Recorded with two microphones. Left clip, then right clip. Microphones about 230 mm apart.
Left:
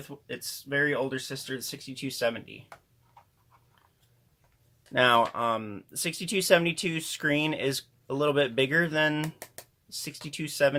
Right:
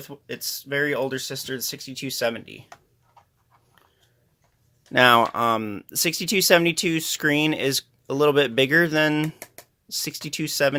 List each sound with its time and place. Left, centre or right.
0.1 s speech: right
4.9 s speech: right